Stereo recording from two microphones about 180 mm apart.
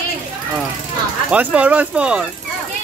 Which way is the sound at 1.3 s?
5° right (ahead or behind).